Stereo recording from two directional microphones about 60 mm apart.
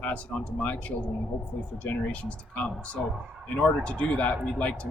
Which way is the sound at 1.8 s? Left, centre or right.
Centre.